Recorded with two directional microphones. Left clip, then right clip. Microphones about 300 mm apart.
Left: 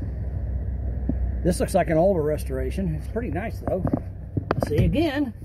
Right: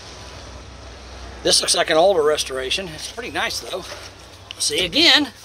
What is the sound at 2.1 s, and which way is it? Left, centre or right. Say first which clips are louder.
Speech: right 6 dB; centre.